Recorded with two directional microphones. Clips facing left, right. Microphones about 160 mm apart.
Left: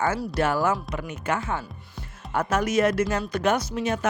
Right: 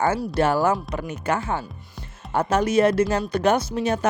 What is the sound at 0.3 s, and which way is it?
Speech, 30° right (ahead or behind).